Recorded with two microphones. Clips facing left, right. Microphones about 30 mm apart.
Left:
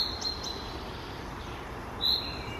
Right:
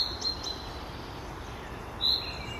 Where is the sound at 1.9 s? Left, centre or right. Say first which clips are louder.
Right 1 dB; centre.